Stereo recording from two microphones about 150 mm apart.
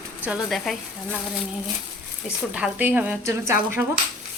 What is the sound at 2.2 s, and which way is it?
Speech, 5° right (ahead or behind).